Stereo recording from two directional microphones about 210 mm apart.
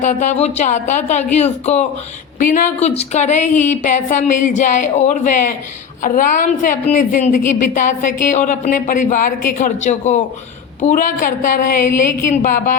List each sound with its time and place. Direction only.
0.0 s speech: 35° left (ahead or behind)